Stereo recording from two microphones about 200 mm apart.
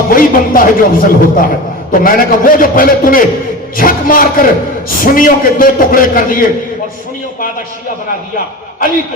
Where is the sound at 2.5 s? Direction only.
45° left (ahead or behind).